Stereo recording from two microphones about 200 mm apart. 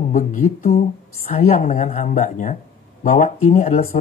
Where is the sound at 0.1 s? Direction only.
40° left (ahead or behind).